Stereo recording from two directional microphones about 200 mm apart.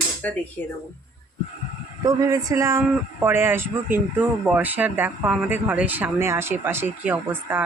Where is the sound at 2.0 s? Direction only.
15° right (ahead or behind).